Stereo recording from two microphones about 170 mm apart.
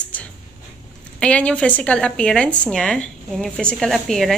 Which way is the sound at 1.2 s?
5° left (ahead or behind).